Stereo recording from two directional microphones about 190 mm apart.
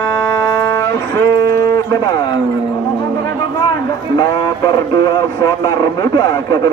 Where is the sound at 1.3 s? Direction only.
15° left (ahead or behind).